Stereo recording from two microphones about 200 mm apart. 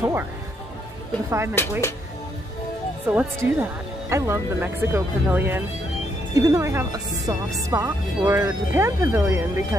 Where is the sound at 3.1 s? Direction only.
10° right (ahead or behind).